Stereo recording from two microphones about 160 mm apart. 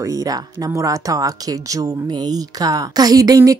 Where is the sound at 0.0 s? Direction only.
20° right (ahead or behind).